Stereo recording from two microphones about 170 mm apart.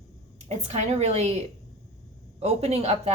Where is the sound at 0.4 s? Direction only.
40° right (ahead or behind).